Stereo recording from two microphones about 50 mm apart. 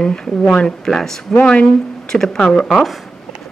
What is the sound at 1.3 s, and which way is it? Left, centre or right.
Speech, left.